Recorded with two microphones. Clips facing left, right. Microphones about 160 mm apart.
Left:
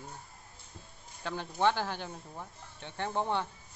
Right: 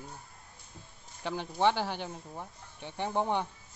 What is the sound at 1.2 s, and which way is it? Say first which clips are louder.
Speech: right 2 dB; 15° right (ahead or behind).